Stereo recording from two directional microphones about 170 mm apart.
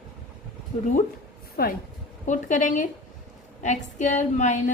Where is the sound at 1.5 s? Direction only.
60° left (ahead or behind).